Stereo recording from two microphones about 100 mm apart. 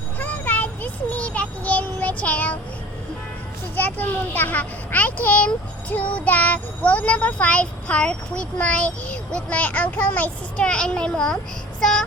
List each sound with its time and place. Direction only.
0.2 s child singing: 15° left (ahead or behind)
3.8 s speech: 20° left (ahead or behind)
11.8 s child singing: 5° left (ahead or behind)